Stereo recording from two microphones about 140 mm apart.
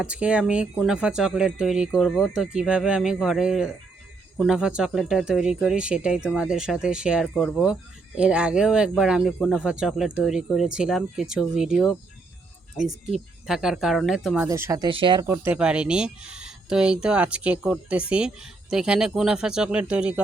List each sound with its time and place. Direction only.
0.0 s speech: 10° right (ahead or behind)
14.3 s speech: 20° right (ahead or behind)
14.8 s speech: 35° right (ahead or behind)
15.2 s speech: 20° right (ahead or behind)
15.5 s speech: 10° right (ahead or behind)